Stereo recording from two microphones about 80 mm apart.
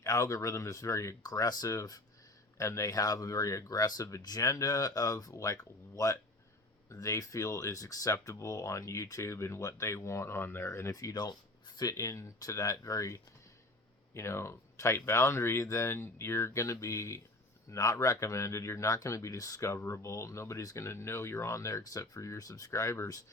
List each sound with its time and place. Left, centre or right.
0.0 s speech: left
10.9 s speech: left
11.8 s speech: left